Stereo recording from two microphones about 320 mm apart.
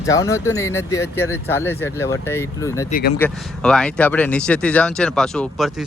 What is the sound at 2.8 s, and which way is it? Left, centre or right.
Speech, left.